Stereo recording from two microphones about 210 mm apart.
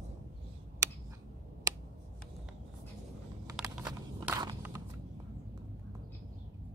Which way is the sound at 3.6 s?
20° right (ahead or behind).